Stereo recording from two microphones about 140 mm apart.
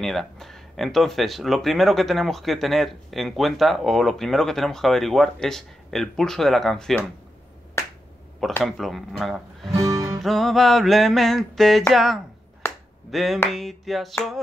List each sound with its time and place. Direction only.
0.0 s speech: centre (ahead or behind)
8.6 s speech: centre (ahead or behind)
12.6 s finger snapping: 15° left (ahead or behind)
13.1 s speech: centre (ahead or behind)